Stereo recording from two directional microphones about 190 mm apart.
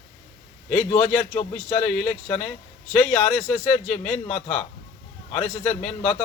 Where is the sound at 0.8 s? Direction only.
40° left (ahead or behind).